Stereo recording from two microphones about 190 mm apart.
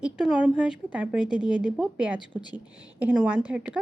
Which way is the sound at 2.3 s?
25° left (ahead or behind).